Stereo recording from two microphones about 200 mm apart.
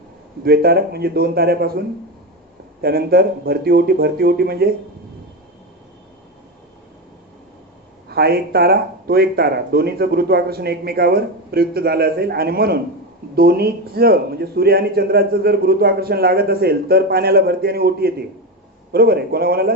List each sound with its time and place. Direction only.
0.4 s a man's voice: 50° right (ahead or behind)
2.8 s a man's voice: 50° right (ahead or behind)
8.0 s a man's voice: 50° right (ahead or behind)